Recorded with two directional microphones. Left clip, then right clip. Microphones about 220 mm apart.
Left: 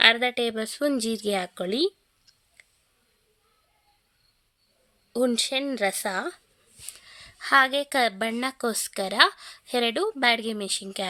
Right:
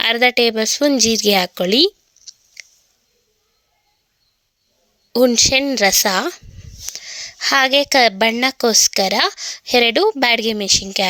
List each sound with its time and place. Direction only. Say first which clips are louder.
0.0 s speech: right 6 dB; 35° right (ahead or behind)
5.1 s a woman's voice: right 11 dB; 30° right (ahead or behind)